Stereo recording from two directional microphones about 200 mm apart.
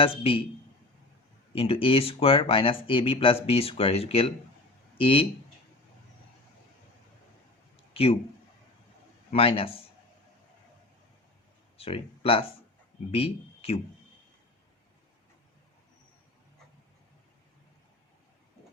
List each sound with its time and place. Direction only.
0.0 s speech: 25° left (ahead or behind)
1.5 s speech: 30° left (ahead or behind)
7.9 s speech: 30° left (ahead or behind)
9.3 s speech: 25° left (ahead or behind)
11.8 s speech: 30° left (ahead or behind)